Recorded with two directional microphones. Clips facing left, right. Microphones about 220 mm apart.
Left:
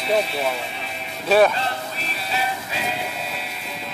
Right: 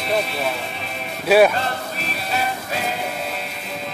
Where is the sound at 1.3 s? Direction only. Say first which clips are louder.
Right 2 dB; 10° right (ahead or behind).